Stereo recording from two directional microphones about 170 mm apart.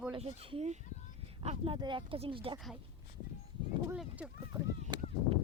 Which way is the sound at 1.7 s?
30° right (ahead or behind).